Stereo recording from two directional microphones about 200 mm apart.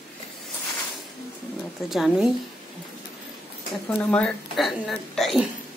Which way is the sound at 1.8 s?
Centre (ahead or behind).